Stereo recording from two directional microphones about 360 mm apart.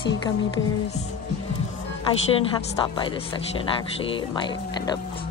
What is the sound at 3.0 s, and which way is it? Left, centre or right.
Speech, centre.